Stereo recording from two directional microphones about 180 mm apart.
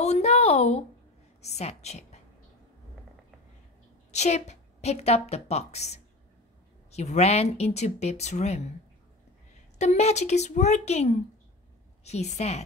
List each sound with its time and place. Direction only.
0.0 s a sound: 35° left (ahead or behind)
1.4 s a woman's voice: 35° left (ahead or behind)
4.1 s a woman's voice: 40° left (ahead or behind)
9.8 s speech: 40° left (ahead or behind)